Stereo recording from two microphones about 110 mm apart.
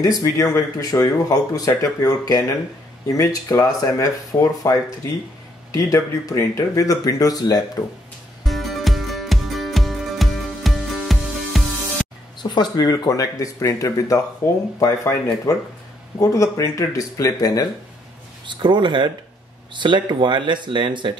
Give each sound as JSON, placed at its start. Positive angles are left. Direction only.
{"t": 0.0, "sound": "speech", "side_deg": 30}
{"t": 8.5, "sound": "music", "side_deg": 0}
{"t": 12.4, "sound": "speech", "side_deg": 40}
{"t": 18.6, "sound": "speech", "side_deg": -45}